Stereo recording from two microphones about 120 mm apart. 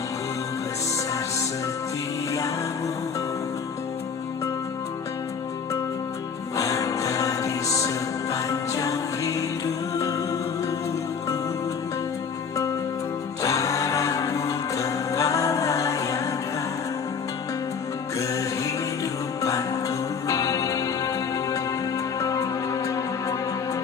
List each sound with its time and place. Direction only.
6.6 s music: 30° left (ahead or behind)
13.4 s music: 25° left (ahead or behind)
18.2 s music: 25° left (ahead or behind)